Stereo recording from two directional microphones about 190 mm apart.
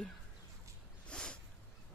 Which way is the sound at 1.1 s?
5° left (ahead or behind).